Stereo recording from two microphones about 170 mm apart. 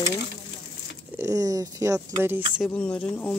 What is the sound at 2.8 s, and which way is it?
Speech, 10° left (ahead or behind).